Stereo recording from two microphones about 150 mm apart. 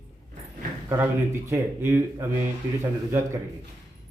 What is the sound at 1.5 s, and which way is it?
Speech, 15° right (ahead or behind).